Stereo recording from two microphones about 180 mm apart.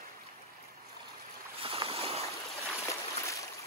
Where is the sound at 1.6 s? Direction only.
30° right (ahead or behind).